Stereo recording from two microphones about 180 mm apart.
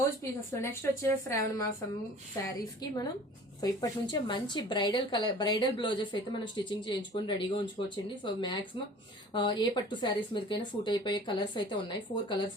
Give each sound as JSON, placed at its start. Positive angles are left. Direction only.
{"t": 0.2, "sound": "a woman's voice", "side_deg": 15}